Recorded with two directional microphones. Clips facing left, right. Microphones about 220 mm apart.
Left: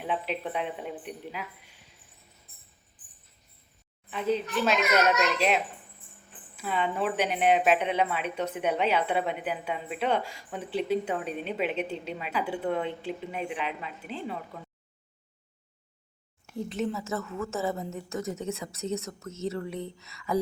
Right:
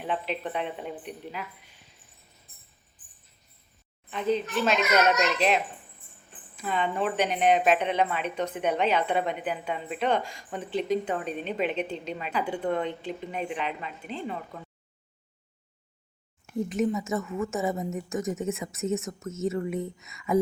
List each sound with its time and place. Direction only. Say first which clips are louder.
0.0 s a child's voice: right 1 dB; 5° left (ahead or behind)
4.1 s a child's voice: right 1 dB; 5° left (ahead or behind)
17.2 s a woman's voice: right 3 dB; 15° right (ahead or behind)
18.8 s a child's voice: right 3 dB; centre (ahead or behind)
20.0 s a sound: right 3 dB; 20° right (ahead or behind)